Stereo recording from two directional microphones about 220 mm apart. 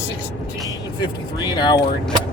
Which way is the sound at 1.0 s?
20° left (ahead or behind).